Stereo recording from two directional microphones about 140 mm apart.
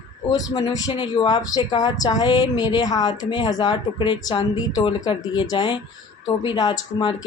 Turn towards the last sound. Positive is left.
turn(degrees=30)  # may be behind; listen again after turning